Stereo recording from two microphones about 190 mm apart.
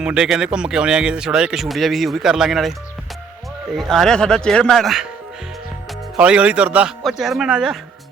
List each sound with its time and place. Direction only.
0.0 s speech: 5° right (ahead or behind)
3.8 s speech: centre (ahead or behind)
6.1 s speech: 5° right (ahead or behind)